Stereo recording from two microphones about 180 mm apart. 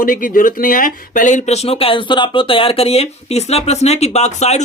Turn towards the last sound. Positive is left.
turn(degrees=40)  # may be behind; listen again after turning